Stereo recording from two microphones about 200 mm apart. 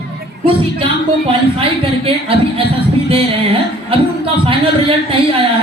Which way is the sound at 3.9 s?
25° right (ahead or behind).